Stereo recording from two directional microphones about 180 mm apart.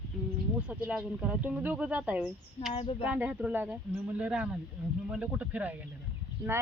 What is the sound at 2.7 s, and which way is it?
Speech, 30° left (ahead or behind).